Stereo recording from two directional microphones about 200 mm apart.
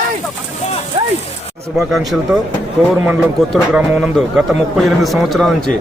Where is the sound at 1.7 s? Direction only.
Centre (ahead or behind).